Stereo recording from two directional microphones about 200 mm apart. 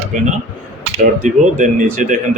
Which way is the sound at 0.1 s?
40° right (ahead or behind).